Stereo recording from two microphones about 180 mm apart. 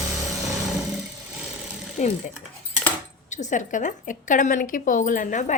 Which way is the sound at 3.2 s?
40° left (ahead or behind).